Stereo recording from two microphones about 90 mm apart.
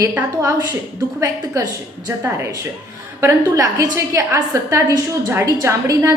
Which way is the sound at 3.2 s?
40° right (ahead or behind).